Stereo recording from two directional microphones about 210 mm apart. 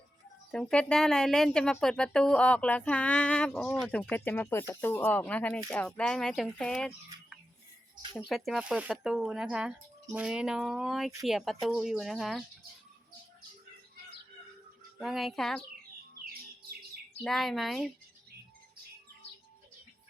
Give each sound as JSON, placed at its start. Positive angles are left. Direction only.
{"t": 0.5, "sound": "speech", "side_deg": 5}
{"t": 14.9, "sound": "speech", "side_deg": 0}
{"t": 17.2, "sound": "speech", "side_deg": 0}